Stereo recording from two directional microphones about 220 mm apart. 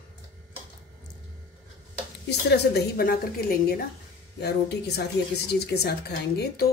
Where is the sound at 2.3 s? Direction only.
50° left (ahead or behind).